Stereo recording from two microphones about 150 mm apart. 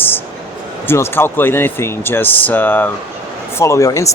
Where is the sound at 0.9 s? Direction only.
15° left (ahead or behind).